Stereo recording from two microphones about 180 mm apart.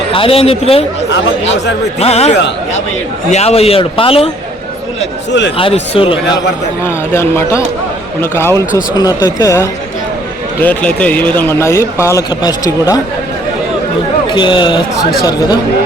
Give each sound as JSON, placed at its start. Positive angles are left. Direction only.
{"t": 0.1, "sound": "a man's voice", "side_deg": 30}
{"t": 2.0, "sound": "a man's voice", "side_deg": 35}
{"t": 5.5, "sound": "speech", "side_deg": 30}
{"t": 7.1, "sound": "a man's voice", "side_deg": 15}
{"t": 10.6, "sound": "a man's voice", "side_deg": 10}
{"t": 14.3, "sound": "speech", "side_deg": 25}